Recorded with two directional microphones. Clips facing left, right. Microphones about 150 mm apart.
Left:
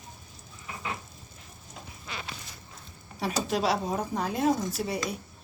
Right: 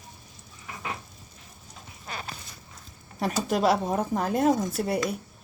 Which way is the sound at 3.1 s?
50° right (ahead or behind).